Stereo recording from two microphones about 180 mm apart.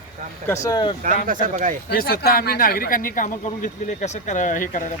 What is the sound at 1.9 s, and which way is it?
Speech, 55° left (ahead or behind).